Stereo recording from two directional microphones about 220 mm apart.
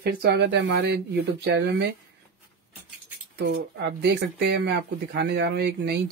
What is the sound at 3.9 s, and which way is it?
Speech, 50° right (ahead or behind).